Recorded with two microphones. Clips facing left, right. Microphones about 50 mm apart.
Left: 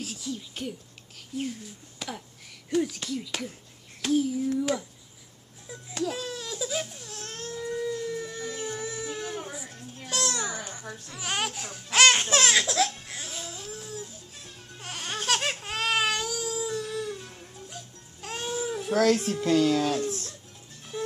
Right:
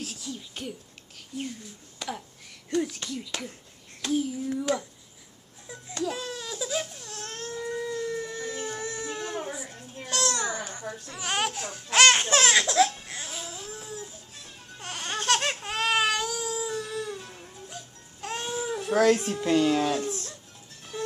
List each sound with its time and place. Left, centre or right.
0.0 s a sound: centre
1.3 s a child's voice: centre
2.0 s a sound: centre
2.7 s a child's voice: centre
5.7 s baby cry: centre
10.0 s babbling: centre
11.1 s laughter: centre
14.4 s baby cry: centre
19.9 s music: centre
20.9 s music: centre